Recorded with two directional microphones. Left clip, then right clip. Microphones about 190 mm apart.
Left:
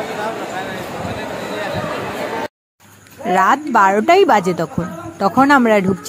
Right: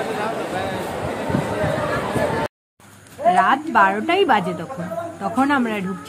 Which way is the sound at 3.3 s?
40° left (ahead or behind).